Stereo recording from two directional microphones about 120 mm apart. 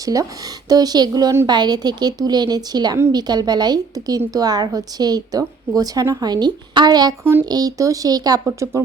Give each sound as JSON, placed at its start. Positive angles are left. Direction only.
{"t": 0.0, "sound": "a woman's voice", "side_deg": -30}